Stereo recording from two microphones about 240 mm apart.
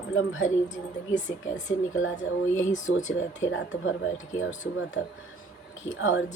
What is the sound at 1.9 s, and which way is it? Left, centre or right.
Speech, left.